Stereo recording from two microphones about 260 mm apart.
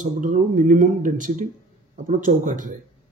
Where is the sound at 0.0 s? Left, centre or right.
Right.